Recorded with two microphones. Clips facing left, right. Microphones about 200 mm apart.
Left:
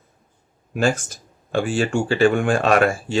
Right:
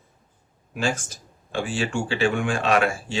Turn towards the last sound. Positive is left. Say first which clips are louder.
# left 4 dB
turn(degrees=50)  # may be behind; listen again after turning